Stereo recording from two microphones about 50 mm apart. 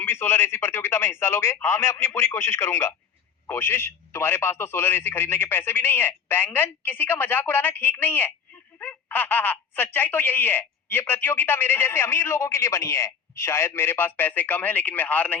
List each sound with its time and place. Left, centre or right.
0.0 s speech: left